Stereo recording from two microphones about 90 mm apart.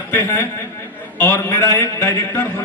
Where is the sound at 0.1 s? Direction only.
25° left (ahead or behind).